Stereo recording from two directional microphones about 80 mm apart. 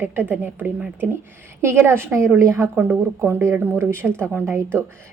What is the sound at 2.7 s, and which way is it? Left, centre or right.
A woman's voice, right.